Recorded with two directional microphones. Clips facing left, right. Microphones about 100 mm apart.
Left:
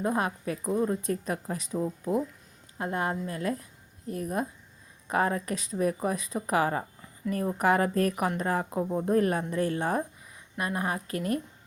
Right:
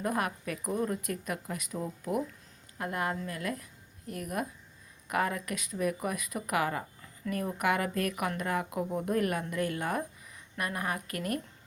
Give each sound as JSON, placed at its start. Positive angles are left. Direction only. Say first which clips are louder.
{"t": 0.0, "sound": "a woman's voice", "louder": "left 3 dB", "side_deg": 25}